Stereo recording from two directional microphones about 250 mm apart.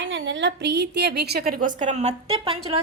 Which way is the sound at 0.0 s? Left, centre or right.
Right.